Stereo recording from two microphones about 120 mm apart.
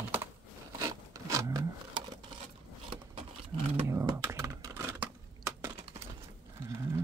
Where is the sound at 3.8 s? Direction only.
25° right (ahead or behind).